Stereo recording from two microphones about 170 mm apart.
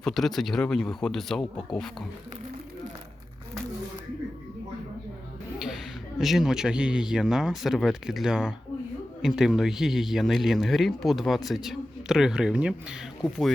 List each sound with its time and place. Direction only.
0.0 s speech: centre (ahead or behind)
5.5 s speech: 5° right (ahead or behind)